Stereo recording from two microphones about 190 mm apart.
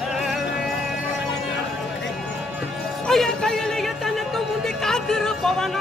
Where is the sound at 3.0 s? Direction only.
5° left (ahead or behind).